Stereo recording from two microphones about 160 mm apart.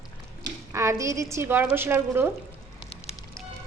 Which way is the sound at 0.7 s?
20° right (ahead or behind).